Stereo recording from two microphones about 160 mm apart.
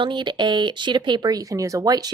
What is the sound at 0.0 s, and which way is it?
A woman's voice, 30° right (ahead or behind).